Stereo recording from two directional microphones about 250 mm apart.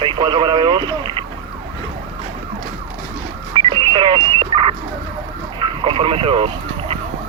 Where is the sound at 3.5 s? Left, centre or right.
Centre.